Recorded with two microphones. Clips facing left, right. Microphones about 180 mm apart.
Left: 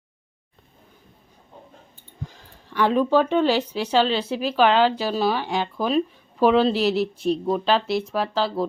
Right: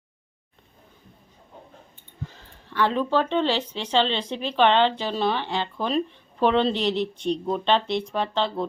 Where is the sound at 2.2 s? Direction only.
10° left (ahead or behind).